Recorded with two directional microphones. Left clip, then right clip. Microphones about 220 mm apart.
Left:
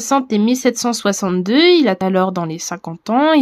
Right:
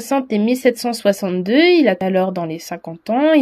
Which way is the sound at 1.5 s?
90° left.